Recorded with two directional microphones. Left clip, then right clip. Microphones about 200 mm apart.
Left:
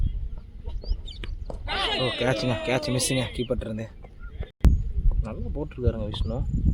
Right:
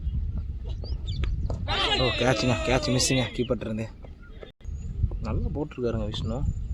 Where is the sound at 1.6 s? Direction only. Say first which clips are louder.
Right 1 dB; 50° left (ahead or behind).